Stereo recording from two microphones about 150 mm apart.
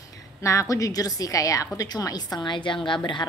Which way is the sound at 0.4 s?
20° left (ahead or behind).